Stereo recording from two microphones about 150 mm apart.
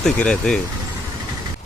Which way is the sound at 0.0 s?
5° left (ahead or behind).